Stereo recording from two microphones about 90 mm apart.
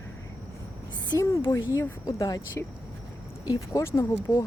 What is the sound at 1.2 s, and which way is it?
Speech, 35° left (ahead or behind).